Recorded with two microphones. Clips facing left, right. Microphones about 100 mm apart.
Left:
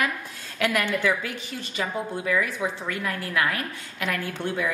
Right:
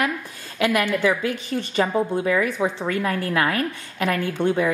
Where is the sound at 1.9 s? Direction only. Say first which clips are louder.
Right 6 dB; 30° right (ahead or behind).